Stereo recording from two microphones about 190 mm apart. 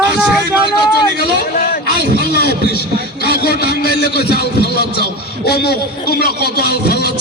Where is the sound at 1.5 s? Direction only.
45° left (ahead or behind).